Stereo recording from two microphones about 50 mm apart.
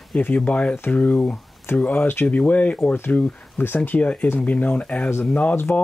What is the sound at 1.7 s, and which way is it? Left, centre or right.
Speech, left.